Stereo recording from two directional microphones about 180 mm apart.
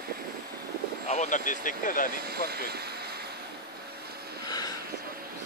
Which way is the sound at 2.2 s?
60° right (ahead or behind).